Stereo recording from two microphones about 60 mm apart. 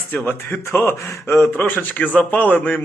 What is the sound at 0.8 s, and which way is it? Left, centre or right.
Speech, left.